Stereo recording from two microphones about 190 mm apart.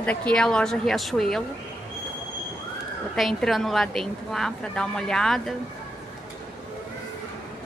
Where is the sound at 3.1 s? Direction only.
Centre (ahead or behind).